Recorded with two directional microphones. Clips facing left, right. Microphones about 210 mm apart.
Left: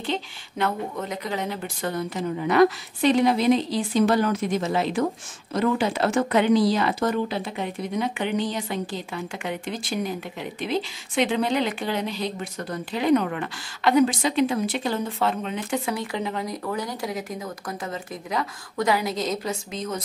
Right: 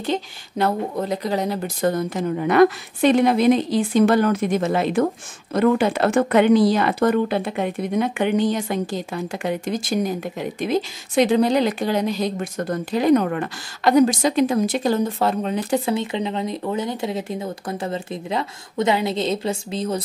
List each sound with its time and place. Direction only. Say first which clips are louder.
0.0 s speech: right 4 dB; 40° right (ahead or behind)